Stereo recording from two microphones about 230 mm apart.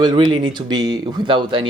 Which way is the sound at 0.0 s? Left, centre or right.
Centre.